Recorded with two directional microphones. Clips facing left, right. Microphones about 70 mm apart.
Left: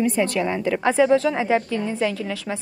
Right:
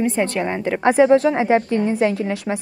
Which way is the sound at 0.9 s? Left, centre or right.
Right.